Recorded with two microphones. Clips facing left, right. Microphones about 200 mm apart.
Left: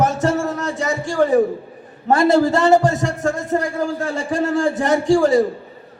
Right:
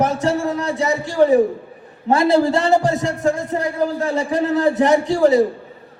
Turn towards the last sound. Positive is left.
turn(degrees=50)  # may be behind; listen again after turning